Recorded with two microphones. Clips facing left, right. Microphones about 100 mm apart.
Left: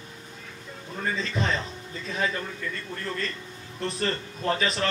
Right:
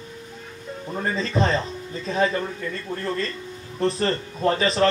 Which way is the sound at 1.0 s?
40° right (ahead or behind).